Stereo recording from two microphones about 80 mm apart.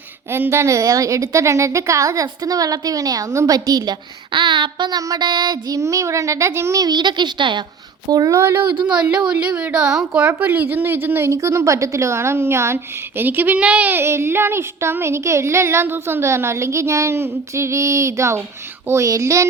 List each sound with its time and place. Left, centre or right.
0.3 s a woman's voice: right
4.3 s a child's voice: right
4.9 s a woman's voice: right
5.3 s a woman's voice: right
6.7 s a child's voice: right
8.1 s a woman's voice: right
8.4 s a woman's voice: right
8.7 s a child's voice: right
9.3 s a woman's voice: centre; by 19.5 s right